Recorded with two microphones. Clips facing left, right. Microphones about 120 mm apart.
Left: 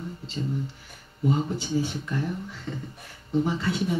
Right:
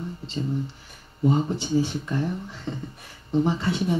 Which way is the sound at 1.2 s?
25° right (ahead or behind).